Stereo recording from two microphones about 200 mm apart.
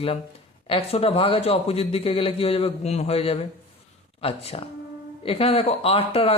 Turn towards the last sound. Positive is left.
turn(degrees=30)  # may be behind; listen again after turning